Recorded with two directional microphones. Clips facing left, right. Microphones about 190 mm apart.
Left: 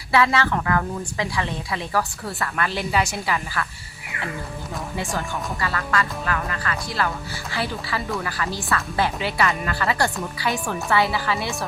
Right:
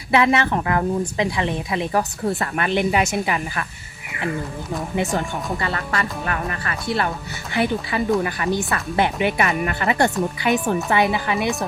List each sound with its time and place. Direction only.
0.1 s a woman's voice: 20° right (ahead or behind)
4.9 s a woman's voice: 20° right (ahead or behind)